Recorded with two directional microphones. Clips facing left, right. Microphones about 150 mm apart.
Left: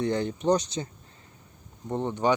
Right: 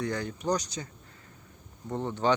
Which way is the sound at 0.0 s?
25° left (ahead or behind).